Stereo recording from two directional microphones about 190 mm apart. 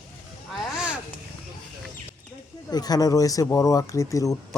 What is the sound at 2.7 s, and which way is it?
Speech, 20° left (ahead or behind).